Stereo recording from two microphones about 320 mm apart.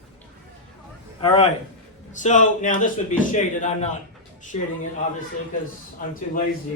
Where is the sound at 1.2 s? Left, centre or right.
Centre.